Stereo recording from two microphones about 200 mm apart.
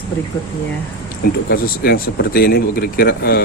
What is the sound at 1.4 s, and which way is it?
Speech, 50° left (ahead or behind).